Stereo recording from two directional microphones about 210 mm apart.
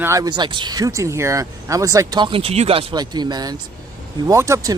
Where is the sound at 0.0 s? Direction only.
15° right (ahead or behind).